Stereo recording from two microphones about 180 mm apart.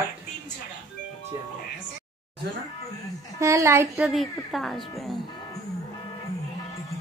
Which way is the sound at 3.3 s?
15° right (ahead or behind).